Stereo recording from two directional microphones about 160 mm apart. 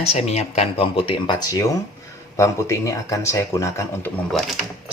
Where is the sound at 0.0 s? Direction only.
40° left (ahead or behind); by 4.1 s 20° left (ahead or behind).